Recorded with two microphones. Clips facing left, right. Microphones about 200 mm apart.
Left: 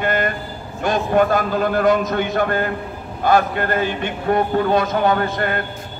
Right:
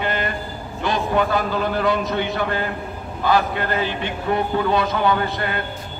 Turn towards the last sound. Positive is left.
turn(degrees=50)  # may be behind; listen again after turning